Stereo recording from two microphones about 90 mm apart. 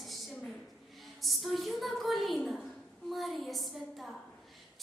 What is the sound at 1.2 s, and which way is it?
A woman's voice, centre (ahead or behind).